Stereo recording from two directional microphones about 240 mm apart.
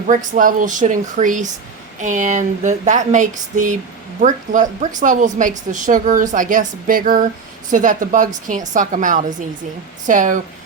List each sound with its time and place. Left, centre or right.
0.1 s a woman's voice: right